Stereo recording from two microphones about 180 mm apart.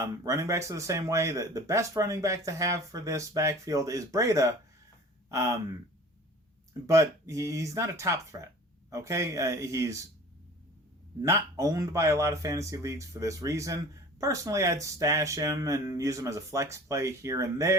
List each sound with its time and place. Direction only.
0.0 s speech: 15° right (ahead or behind)
6.8 s speech: 15° right (ahead or behind)
11.2 s speech: 15° right (ahead or behind)